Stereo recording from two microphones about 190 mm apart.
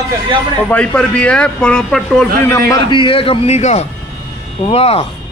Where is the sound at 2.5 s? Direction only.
20° left (ahead or behind).